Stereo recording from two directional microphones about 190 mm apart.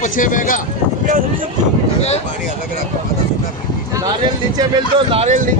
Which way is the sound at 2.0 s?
35° left (ahead or behind).